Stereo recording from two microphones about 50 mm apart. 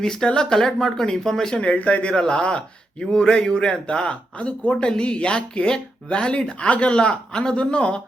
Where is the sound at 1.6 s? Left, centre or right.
Left.